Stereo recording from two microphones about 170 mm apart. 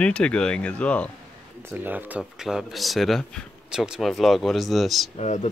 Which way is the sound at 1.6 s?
10° right (ahead or behind).